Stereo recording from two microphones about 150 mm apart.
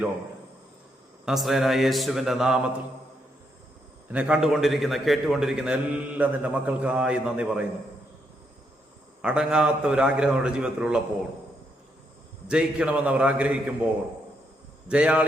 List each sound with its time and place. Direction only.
1.2 s a man's voice: centre (ahead or behind)
4.1 s a man's voice: 10° right (ahead or behind)
9.2 s a man's voice: 5° right (ahead or behind)
12.5 s a man's voice: 5° right (ahead or behind)